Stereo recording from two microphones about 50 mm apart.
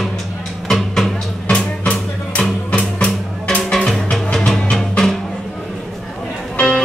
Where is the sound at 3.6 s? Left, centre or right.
Centre.